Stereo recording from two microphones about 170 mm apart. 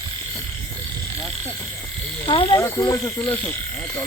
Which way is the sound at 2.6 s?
15° left (ahead or behind).